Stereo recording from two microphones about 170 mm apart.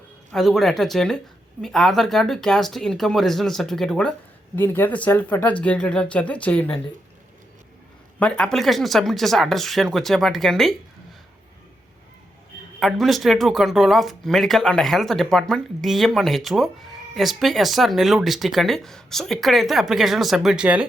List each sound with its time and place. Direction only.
0.3 s speech: centre (ahead or behind)
8.2 s speech: 5° left (ahead or behind)
12.8 s speech: centre (ahead or behind)